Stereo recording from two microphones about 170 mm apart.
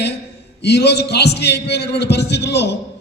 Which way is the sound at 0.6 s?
80° left.